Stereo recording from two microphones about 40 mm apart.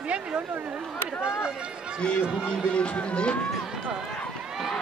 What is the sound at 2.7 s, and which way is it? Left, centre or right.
Speech, left.